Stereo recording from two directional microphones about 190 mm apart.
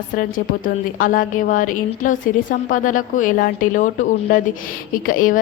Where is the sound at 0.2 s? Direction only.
45° left (ahead or behind).